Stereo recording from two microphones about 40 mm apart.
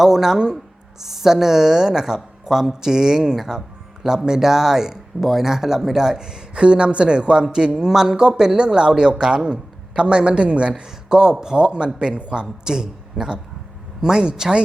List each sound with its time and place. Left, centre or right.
0.0 s speech: centre